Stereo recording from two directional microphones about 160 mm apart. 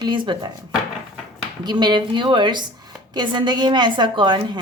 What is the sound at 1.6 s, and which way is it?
A woman's voice, 25° right (ahead or behind).